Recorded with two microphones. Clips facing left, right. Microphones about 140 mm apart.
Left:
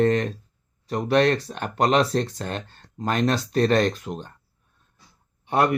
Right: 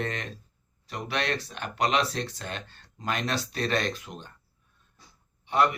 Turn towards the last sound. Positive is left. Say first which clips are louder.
# left 3 dB
turn(degrees=50)  # may be behind; listen again after turning